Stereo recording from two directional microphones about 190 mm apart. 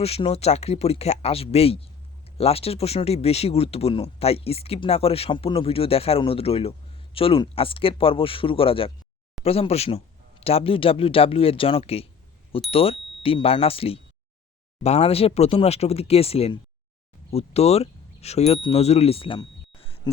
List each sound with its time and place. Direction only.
0.0 s speech: 30° left (ahead or behind)